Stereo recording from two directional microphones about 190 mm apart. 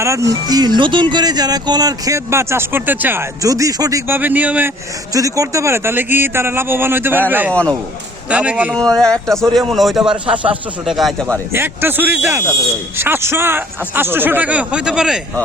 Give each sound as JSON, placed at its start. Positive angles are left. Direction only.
{"t": 0.0, "sound": "speech", "side_deg": -15}
{"t": 7.5, "sound": "a man's voice", "side_deg": 5}
{"t": 8.3, "sound": "speech", "side_deg": -5}
{"t": 8.7, "sound": "a man's voice", "side_deg": 5}
{"t": 11.3, "sound": "speech", "side_deg": -10}